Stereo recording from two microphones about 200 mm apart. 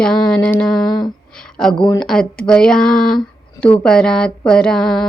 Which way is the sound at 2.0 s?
5° left (ahead or behind).